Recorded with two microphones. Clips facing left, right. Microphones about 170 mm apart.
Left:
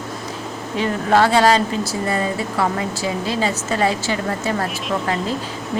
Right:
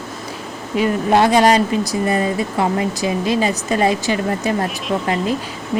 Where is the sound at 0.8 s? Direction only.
15° right (ahead or behind).